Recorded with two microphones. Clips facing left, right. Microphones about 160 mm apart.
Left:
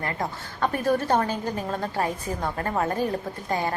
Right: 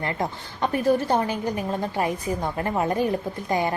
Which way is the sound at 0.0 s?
20° right (ahead or behind).